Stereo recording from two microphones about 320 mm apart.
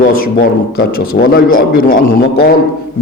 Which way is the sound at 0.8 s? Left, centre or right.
Left.